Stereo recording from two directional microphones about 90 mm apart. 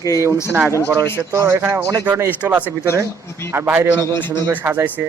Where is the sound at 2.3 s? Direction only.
15° right (ahead or behind).